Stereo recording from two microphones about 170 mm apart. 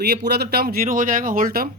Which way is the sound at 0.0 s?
75° right (ahead or behind).